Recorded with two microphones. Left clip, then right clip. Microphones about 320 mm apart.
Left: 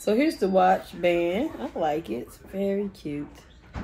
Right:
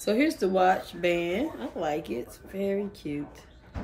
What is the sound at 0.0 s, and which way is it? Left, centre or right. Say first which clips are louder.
Speech: left 2 dB; centre.